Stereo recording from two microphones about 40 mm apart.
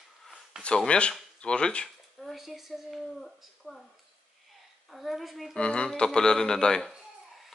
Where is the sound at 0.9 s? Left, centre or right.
Left.